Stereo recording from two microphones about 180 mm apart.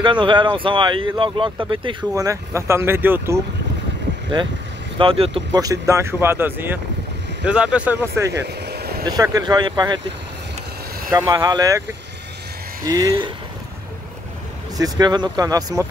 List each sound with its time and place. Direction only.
0.0 s speech: 25° right (ahead or behind); by 3.3 s 10° right (ahead or behind)
4.9 s speech: 30° right (ahead or behind); by 8.3 s 10° right (ahead or behind)
8.3 s vehicle: 65° right (ahead or behind)
9.0 s speech: 20° right (ahead or behind)
11.1 s speech: 20° right (ahead or behind)
12.8 s speech: 20° right (ahead or behind)
14.8 s speech: 25° right (ahead or behind)